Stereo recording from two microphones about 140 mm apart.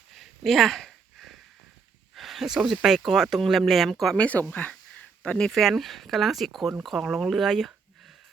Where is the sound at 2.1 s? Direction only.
Centre (ahead or behind).